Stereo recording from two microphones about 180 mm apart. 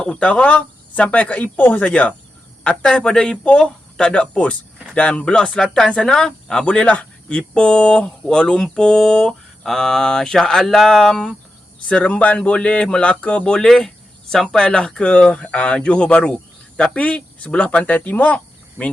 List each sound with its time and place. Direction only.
0.0 s speech: 5° left (ahead or behind)